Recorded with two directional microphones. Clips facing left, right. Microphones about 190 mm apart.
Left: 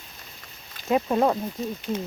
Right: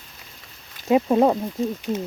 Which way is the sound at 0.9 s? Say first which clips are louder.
Right 4 dB; 15° right (ahead or behind).